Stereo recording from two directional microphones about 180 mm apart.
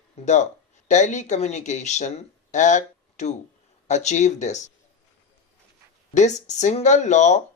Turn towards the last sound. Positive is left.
turn(degrees=40)  # may be behind; listen again after turning